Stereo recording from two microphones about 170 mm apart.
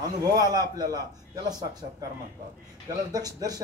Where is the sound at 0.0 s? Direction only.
20° right (ahead or behind).